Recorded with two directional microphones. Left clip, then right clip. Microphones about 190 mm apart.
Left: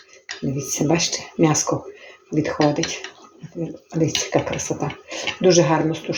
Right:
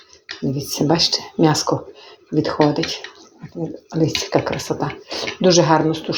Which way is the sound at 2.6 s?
Centre (ahead or behind).